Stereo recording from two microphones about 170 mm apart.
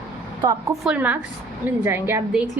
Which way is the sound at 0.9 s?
10° right (ahead or behind).